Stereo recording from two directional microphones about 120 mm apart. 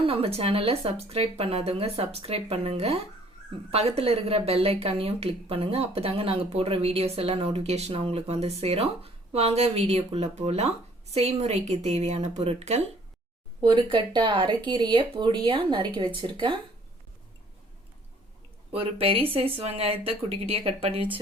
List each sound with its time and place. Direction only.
0.0 s a woman's voice: 50° right (ahead or behind)
13.6 s speech: 40° right (ahead or behind)
18.7 s a woman's voice: 50° right (ahead or behind)